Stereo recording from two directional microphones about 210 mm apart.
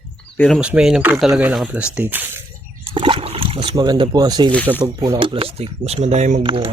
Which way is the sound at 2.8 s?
25° right (ahead or behind).